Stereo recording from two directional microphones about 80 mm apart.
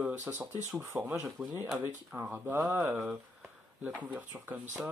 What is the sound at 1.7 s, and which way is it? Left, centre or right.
Speech, right.